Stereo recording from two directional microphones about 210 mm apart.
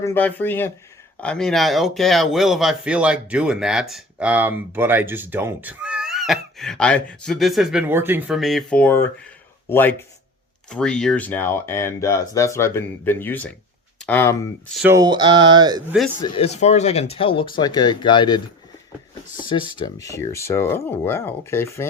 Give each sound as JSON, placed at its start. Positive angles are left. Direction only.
{"t": 0.0, "sound": "speech", "side_deg": 10}
{"t": 14.9, "sound": "speech", "side_deg": -20}
{"t": 16.2, "sound": "speech", "side_deg": 25}